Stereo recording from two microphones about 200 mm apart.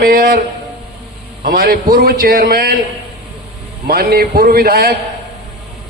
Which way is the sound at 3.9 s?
50° right (ahead or behind).